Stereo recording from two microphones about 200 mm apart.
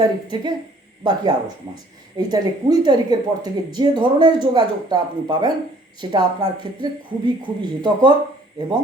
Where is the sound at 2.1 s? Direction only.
20° right (ahead or behind).